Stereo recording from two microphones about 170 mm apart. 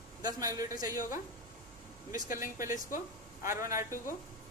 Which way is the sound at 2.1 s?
55° left (ahead or behind).